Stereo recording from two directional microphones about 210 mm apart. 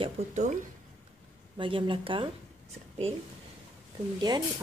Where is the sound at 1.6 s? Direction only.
25° right (ahead or behind).